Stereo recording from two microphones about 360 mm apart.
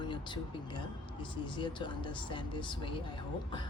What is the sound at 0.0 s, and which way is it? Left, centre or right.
Speech, centre.